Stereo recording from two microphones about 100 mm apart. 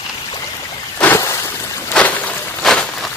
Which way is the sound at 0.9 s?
25° left (ahead or behind).